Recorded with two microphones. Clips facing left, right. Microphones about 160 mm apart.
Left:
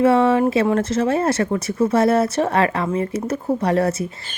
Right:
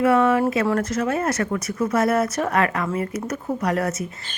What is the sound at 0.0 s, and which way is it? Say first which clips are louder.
Speech: left 3 dB; 25° left (ahead or behind).